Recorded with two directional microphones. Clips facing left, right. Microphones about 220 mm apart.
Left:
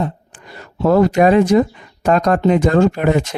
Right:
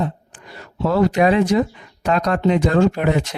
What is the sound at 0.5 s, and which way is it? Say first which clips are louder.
Speech: left 6 dB; 45° left (ahead or behind).